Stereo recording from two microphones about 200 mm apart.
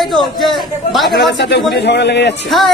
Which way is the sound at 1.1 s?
60° left (ahead or behind).